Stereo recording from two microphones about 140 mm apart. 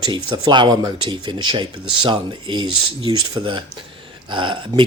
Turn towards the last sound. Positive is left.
turn(degrees=-35)  # may be behind; listen again after turning